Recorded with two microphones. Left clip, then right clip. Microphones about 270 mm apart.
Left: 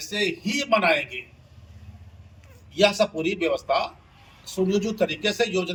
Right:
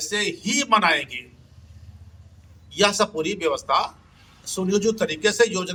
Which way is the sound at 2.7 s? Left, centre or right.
Centre.